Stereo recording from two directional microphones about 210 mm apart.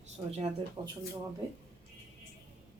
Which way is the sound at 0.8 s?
20° right (ahead or behind).